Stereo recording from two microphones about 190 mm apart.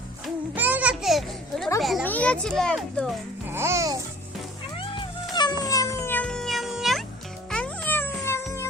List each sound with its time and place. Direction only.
0.5 s children playing: 10° right (ahead or behind)
1.8 s a child's voice: centre (ahead or behind)
3.5 s babbling: 15° right (ahead or behind)
5.3 s cat: 20° left (ahead or behind); by 7.0 s centre (ahead or behind)
7.5 s music: 5° left (ahead or behind)